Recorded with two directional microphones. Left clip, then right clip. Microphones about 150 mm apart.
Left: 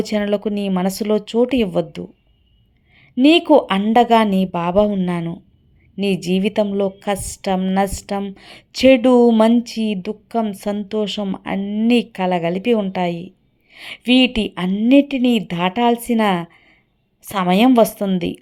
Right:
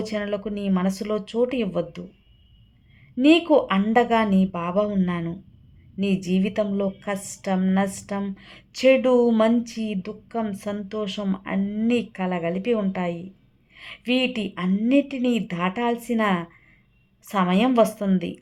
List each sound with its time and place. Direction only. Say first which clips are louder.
0.1 s speech: left 8 dB; 35° left (ahead or behind)
3.2 s a woman's voice: left 5 dB; 30° left (ahead or behind)
6.0 s a woman's voice: left 6 dB; 30° left (ahead or behind)
11.6 s speech: left 5 dB; 10° left (ahead or behind)
11.9 s a woman's voice: left 8 dB; 30° left (ahead or behind)